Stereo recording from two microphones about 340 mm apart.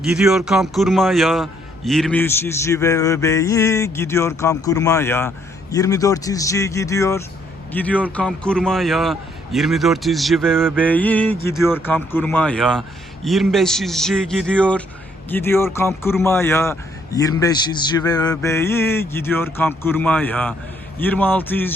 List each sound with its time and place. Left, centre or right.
0.0 s a man's voice: centre